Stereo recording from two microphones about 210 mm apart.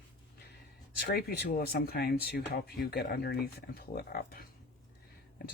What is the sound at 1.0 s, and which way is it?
Speech, 45° left (ahead or behind).